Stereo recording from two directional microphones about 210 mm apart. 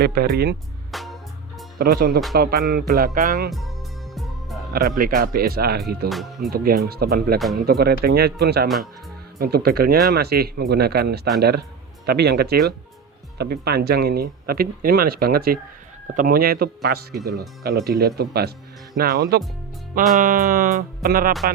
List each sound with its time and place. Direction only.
0.0 s speech: 50° right (ahead or behind)
0.9 s music: centre (ahead or behind)
1.8 s speech: 45° right (ahead or behind)
4.1 s music: centre (ahead or behind)
4.7 s speech: 45° right (ahead or behind)
6.1 s speech: centre (ahead or behind)
6.5 s speech: 45° right (ahead or behind)
8.6 s speech: centre (ahead or behind)
9.4 s speech: 45° right (ahead or behind)